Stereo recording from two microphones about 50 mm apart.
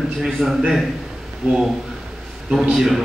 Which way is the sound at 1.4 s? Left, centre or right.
Right.